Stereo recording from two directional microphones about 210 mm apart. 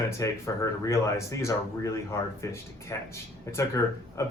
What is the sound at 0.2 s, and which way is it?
Speech, 15° left (ahead or behind).